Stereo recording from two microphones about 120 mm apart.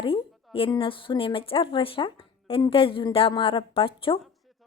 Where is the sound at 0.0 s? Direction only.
50° left (ahead or behind).